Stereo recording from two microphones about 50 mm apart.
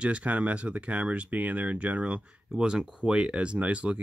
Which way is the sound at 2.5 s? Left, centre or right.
Centre.